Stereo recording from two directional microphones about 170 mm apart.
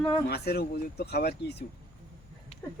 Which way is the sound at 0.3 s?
70° left (ahead or behind).